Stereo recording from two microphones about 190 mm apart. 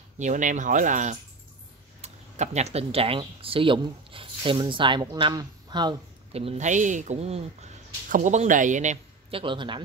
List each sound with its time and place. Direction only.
0.2 s speech: 40° right (ahead or behind); by 9.8 s 25° right (ahead or behind)